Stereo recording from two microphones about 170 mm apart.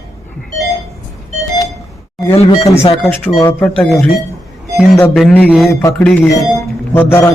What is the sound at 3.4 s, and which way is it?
Speech, 10° left (ahead or behind).